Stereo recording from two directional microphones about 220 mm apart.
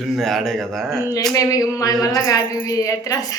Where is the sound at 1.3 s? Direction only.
15° left (ahead or behind).